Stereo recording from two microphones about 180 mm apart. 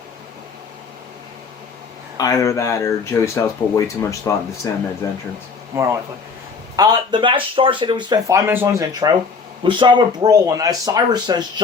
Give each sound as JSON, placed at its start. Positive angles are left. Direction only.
{"t": 2.1, "sound": "speech", "side_deg": 20}
{"t": 6.7, "sound": "speech", "side_deg": -20}